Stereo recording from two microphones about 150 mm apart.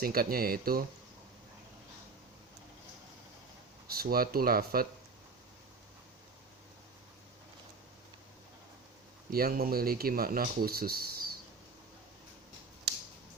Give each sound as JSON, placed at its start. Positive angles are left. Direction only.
{"t": 0.0, "sound": "speech", "side_deg": -80}
{"t": 3.8, "sound": "speech", "side_deg": -90}
{"t": 9.3, "sound": "speech", "side_deg": -85}